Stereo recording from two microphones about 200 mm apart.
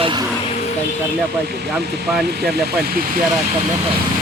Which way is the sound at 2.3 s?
50° right (ahead or behind).